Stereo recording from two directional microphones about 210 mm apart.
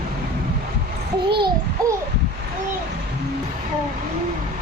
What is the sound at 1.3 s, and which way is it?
Babbling, 20° right (ahead or behind).